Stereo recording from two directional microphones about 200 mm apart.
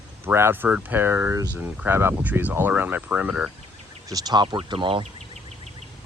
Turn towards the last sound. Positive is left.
turn(degrees=-25)  # may be behind; listen again after turning